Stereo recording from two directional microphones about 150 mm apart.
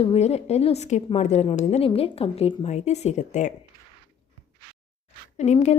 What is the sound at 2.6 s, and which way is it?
Speech, 50° left (ahead or behind).